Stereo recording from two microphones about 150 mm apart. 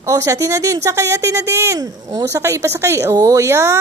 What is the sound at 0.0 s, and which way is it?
A woman's voice, 20° right (ahead or behind).